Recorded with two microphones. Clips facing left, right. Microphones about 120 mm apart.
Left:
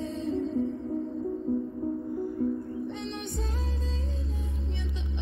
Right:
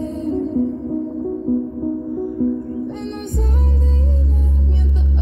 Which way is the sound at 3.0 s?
45° right (ahead or behind).